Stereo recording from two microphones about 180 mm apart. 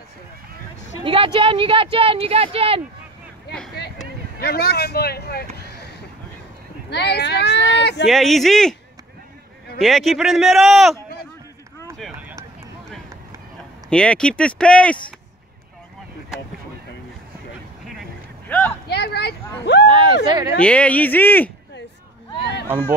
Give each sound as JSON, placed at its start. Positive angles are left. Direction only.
{"t": 1.0, "sound": "speech", "side_deg": -30}
{"t": 4.4, "sound": "speech", "side_deg": 60}
{"t": 5.6, "sound": "a sound", "side_deg": 60}
{"t": 6.9, "sound": "speech", "side_deg": 70}
{"t": 8.0, "sound": "speech", "side_deg": 0}
{"t": 9.8, "sound": "speech", "side_deg": 0}
{"t": 12.0, "sound": "run", "side_deg": -5}
{"t": 13.8, "sound": "speech", "side_deg": 5}
{"t": 18.5, "sound": "a sound", "side_deg": 5}
{"t": 18.9, "sound": "a sound", "side_deg": 65}
{"t": 19.9, "sound": "a sound", "side_deg": -30}
{"t": 20.2, "sound": "speech", "side_deg": -25}
{"t": 20.5, "sound": "speech", "side_deg": 5}